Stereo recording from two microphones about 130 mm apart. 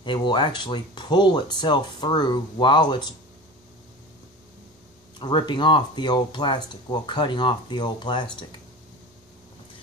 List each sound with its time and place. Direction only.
0.0 s speech: 40° left (ahead or behind)
5.2 s speech: 35° left (ahead or behind)